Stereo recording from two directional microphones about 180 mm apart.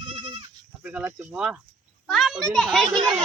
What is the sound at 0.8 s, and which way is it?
Speech, 5° right (ahead or behind).